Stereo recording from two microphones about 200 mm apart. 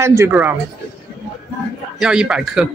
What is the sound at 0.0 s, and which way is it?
Speech, 15° right (ahead or behind).